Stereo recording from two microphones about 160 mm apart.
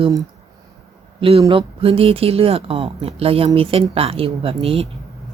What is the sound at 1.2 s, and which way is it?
A man's voice, 35° right (ahead or behind).